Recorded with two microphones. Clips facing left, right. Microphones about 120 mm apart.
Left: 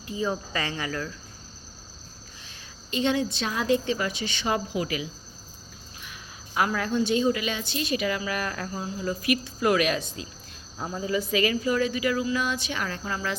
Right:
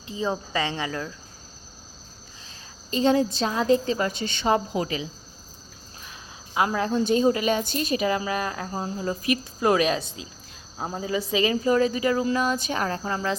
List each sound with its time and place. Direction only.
0.1 s speech: 25° right (ahead or behind)
2.9 s speech: 35° right (ahead or behind)
6.5 s speech: 25° right (ahead or behind)
7.0 s a woman's voice: 40° right (ahead or behind)
11.0 s speech: 25° right (ahead or behind)